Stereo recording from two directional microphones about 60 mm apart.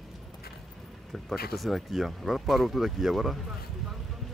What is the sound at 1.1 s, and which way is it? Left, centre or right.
Speech, centre.